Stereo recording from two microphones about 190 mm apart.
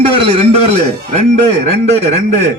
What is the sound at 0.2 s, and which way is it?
A man's voice, 30° right (ahead or behind).